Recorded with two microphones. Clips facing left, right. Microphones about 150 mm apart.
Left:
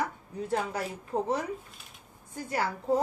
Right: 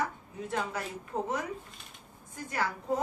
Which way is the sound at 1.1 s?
35° left (ahead or behind).